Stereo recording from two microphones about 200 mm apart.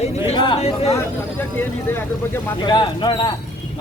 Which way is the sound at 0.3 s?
25° left (ahead or behind).